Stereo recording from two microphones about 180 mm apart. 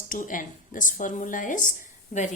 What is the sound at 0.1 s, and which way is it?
A woman's voice, 50° left (ahead or behind).